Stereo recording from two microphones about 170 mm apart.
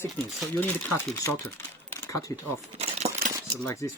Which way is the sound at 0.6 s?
15° left (ahead or behind).